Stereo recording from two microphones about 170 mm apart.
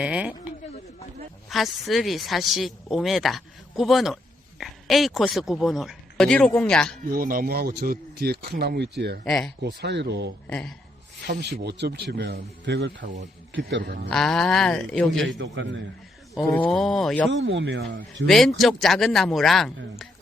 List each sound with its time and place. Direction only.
0.0 s speech: 5° right (ahead or behind)
7.0 s speech: 55° right (ahead or behind); by 9.1 s 75° right (ahead or behind)
9.2 s speech: 5° left (ahead or behind)
9.6 s speech: 80° right
10.4 s speech: 5° left (ahead or behind)
11.3 s a man's voice: 80° right
14.1 s speech: 5° left (ahead or behind)
15.3 s speech: 90° right
16.3 s speech: 5° left (ahead or behind)
17.3 s speech: 90° right
18.3 s speech: centre (ahead or behind)